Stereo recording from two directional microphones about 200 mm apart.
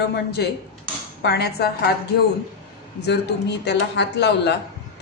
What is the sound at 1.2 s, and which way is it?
Speech, 55° left (ahead or behind).